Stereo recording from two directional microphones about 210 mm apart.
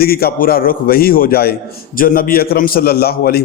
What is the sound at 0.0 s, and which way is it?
A man's voice, 45° left (ahead or behind).